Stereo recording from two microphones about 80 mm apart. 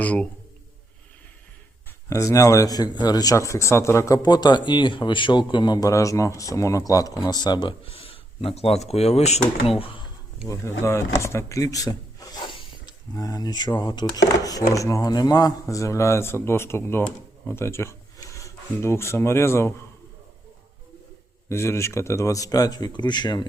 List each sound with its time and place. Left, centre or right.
0.0 s a man's voice: centre
2.0 s speech: left
3.3 s speech: left
4.2 s a man's voice: left
7.3 s a man's voice: left
10.5 s speech: left
12.4 s a sound: left
13.1 s speech: left
21.5 s speech: left